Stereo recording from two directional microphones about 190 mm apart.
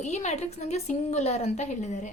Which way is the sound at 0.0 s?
40° left (ahead or behind).